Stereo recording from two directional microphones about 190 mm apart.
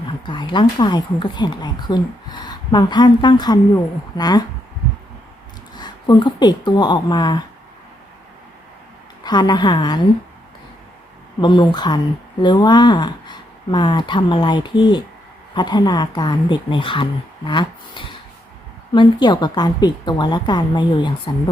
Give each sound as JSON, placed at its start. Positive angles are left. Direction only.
{"t": 0.3, "sound": "a woman's voice", "side_deg": 25}
{"t": 5.7, "sound": "speech", "side_deg": 20}
{"t": 9.2, "sound": "a woman's voice", "side_deg": 20}
{"t": 11.3, "sound": "a woman's voice", "side_deg": 25}